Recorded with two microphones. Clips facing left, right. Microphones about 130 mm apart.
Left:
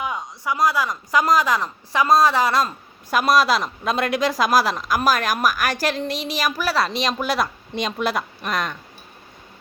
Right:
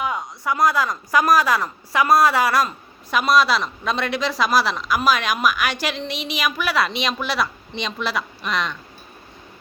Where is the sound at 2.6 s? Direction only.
40° left (ahead or behind).